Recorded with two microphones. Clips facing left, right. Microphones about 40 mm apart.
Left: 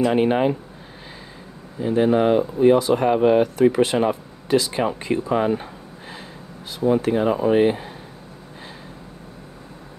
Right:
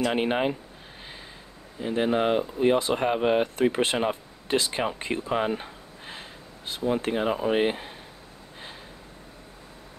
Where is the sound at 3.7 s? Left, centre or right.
Right.